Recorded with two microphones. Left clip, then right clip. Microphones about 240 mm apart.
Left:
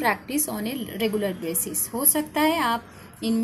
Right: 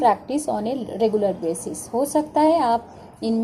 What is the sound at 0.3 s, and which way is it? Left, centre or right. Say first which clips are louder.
A woman's voice: right 6 dB; left.